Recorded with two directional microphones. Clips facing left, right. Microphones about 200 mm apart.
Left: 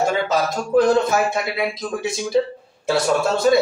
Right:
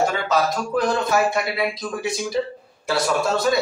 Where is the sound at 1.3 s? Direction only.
25° left (ahead or behind).